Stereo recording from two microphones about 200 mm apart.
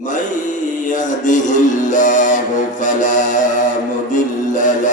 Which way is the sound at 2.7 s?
40° left (ahead or behind).